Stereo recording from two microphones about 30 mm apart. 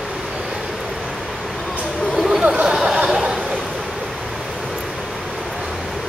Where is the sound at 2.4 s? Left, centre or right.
Right.